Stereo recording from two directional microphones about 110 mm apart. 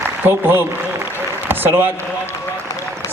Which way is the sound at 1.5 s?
20° right (ahead or behind).